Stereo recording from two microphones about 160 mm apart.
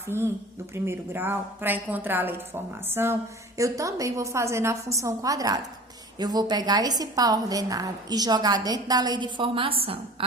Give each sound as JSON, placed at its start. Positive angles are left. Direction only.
{"t": 0.1, "sound": "a woman's voice", "side_deg": -15}